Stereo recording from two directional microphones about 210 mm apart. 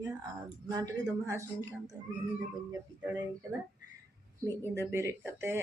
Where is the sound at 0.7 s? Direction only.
15° right (ahead or behind).